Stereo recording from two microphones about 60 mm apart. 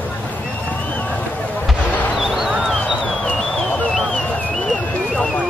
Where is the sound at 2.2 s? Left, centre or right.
Centre.